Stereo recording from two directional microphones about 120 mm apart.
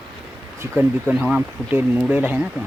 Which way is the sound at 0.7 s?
15° right (ahead or behind).